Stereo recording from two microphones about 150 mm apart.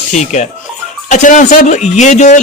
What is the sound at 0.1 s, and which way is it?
Speech, 50° left (ahead or behind).